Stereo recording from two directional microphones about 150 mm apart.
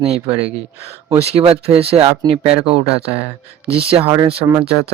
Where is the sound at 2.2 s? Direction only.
40° right (ahead or behind).